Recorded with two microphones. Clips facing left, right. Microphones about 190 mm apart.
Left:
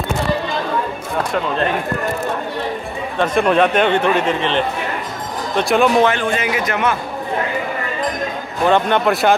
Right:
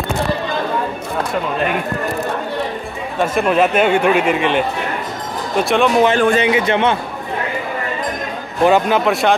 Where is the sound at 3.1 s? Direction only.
5° right (ahead or behind).